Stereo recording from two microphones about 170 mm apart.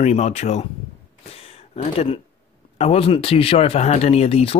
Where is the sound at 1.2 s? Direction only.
35° left (ahead or behind).